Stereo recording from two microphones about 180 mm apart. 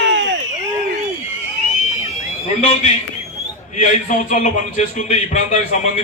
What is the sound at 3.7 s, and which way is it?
A man's voice, 45° left (ahead or behind).